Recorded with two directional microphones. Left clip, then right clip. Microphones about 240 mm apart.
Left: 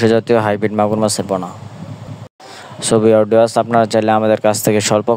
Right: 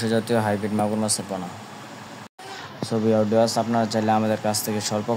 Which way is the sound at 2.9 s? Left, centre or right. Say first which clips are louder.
Left 10 dB; left.